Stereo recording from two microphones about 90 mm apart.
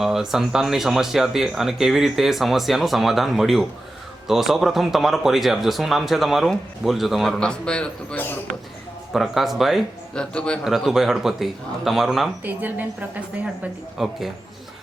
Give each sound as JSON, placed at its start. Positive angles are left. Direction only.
{"t": 0.0, "sound": "speech", "side_deg": -5}
{"t": 9.1, "sound": "speech", "side_deg": 0}
{"t": 10.2, "sound": "a man's voice", "side_deg": 10}
{"t": 10.6, "sound": "speech", "side_deg": 0}
{"t": 12.5, "sound": "a woman's voice", "side_deg": -20}
{"t": 14.0, "sound": "speech", "side_deg": -5}